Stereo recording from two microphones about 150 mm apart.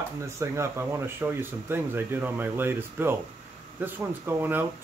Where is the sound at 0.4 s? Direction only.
20° right (ahead or behind).